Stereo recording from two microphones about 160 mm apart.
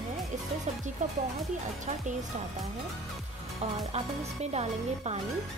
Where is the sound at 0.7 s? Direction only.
45° right (ahead or behind).